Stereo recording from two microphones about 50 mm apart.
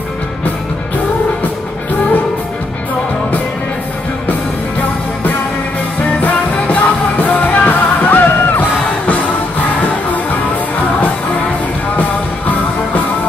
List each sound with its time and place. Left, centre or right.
6.2 s music: left
12.0 s music: left